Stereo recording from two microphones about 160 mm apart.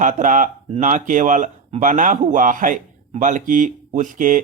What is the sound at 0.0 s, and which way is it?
Speech, 55° right (ahead or behind).